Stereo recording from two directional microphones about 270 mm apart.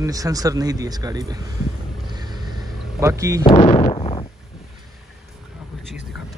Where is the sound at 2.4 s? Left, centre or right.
Centre.